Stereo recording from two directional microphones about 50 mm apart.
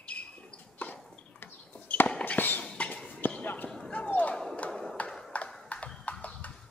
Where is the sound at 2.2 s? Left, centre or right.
Left.